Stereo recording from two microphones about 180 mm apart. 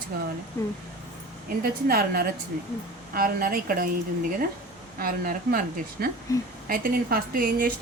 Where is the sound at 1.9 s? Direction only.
55° right (ahead or behind).